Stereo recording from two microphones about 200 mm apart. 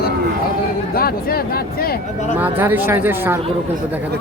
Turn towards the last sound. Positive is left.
turn(degrees=-10)  # may be behind; listen again after turning